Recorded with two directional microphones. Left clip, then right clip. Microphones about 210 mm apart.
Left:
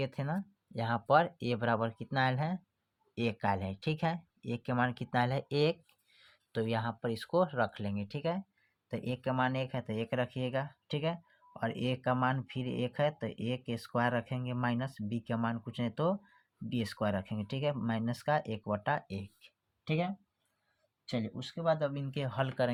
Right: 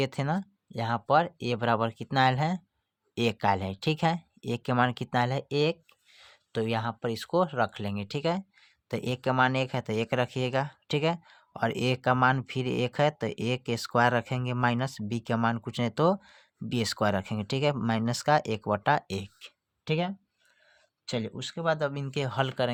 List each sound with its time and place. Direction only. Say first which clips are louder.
0.0 s speech: right 7 dB; 35° right (ahead or behind)